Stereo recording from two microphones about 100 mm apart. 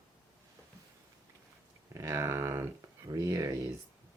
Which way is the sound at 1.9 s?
25° right (ahead or behind).